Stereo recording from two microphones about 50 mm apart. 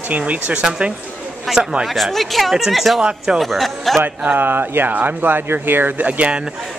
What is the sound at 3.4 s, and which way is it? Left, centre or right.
Speech, centre.